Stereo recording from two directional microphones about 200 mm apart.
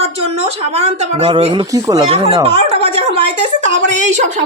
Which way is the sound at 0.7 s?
30° right (ahead or behind).